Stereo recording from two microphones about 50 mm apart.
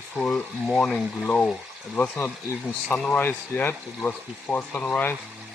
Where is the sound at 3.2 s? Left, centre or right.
Left.